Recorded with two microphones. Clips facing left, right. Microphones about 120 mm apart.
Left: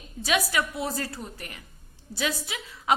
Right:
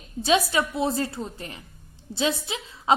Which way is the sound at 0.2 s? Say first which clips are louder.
Right 4 dB; 25° right (ahead or behind).